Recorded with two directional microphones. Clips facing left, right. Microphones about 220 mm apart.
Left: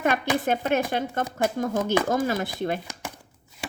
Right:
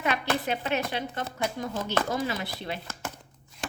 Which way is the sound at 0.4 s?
50° left (ahead or behind).